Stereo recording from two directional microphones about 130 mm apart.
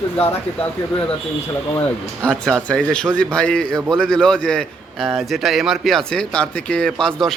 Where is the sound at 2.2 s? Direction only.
5° left (ahead or behind).